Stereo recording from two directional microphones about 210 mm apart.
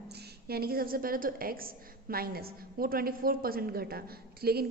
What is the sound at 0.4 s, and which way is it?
A woman's voice, 45° right (ahead or behind).